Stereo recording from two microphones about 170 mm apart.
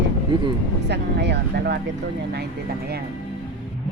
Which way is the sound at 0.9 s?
90° right.